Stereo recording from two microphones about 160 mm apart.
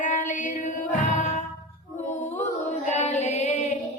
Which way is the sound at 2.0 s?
50° left (ahead or behind).